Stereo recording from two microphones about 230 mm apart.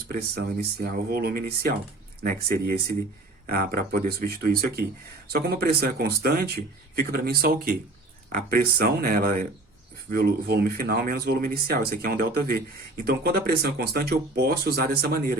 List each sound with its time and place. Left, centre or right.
0.1 s speech: right